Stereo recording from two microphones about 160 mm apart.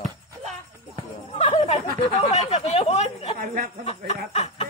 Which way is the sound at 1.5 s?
45° left (ahead or behind).